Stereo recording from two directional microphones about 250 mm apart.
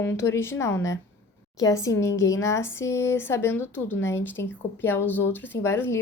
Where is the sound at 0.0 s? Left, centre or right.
Centre.